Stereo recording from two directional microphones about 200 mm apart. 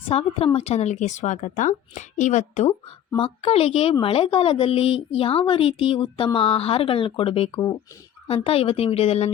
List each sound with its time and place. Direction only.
0.1 s a woman's voice: 30° left (ahead or behind)